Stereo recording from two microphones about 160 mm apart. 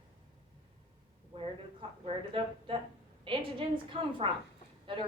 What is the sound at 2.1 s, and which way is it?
A woman's voice, 30° right (ahead or behind).